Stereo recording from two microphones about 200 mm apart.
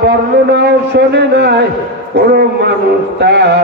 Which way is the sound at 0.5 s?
55° right (ahead or behind).